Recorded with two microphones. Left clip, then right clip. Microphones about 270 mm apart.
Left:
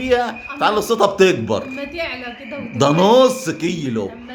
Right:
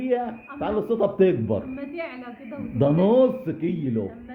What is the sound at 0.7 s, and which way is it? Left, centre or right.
Speech, left.